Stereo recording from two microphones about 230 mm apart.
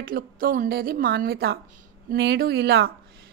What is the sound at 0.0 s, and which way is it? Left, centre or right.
A woman's voice, right.